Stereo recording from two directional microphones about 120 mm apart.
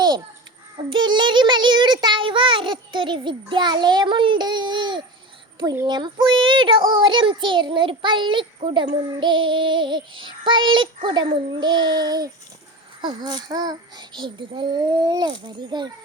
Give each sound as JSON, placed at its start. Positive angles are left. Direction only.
{"t": 0.9, "sound": "child singing", "side_deg": -40}